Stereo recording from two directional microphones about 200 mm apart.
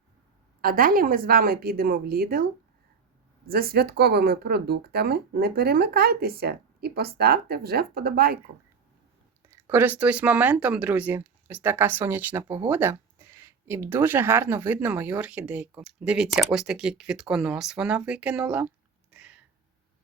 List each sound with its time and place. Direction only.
0.6 s speech: 45° right (ahead or behind)
9.5 s speech: 10° right (ahead or behind)
19.1 s a sound: 5° right (ahead or behind)